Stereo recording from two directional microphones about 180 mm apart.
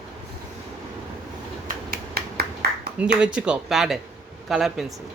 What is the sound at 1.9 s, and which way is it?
Finger snapping, 60° right (ahead or behind).